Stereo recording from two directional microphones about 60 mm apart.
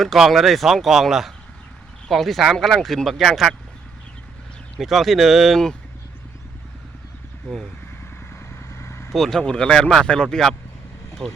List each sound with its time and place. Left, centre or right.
0.2 s speech: centre
4.8 s speech: centre
8.5 s vehicle: left
9.1 s speech: centre
9.4 s speech: centre